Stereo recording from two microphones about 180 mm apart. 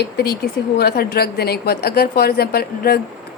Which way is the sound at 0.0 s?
60° left (ahead or behind).